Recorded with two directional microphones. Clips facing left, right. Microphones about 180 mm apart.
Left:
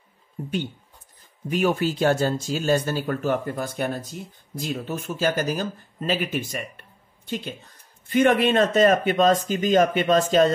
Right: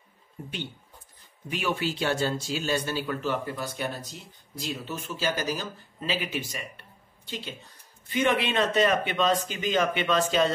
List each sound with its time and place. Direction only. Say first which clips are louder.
1.5 s speech: left 7 dB; 45° left (ahead or behind)